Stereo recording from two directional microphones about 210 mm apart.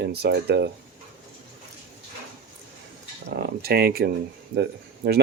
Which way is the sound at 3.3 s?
50° right (ahead or behind).